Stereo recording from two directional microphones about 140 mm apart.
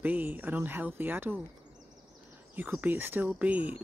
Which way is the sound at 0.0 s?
10° right (ahead or behind).